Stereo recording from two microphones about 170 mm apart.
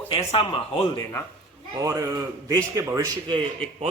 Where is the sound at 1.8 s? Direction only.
20° right (ahead or behind).